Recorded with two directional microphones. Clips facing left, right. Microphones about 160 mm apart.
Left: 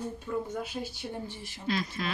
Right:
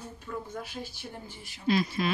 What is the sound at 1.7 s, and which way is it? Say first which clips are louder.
Speech: right 5 dB; 10° right (ahead or behind).